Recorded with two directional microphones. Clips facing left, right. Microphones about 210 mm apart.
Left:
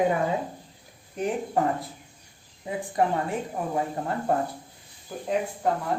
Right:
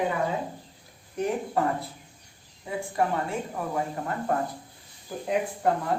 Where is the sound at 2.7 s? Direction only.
20° left (ahead or behind).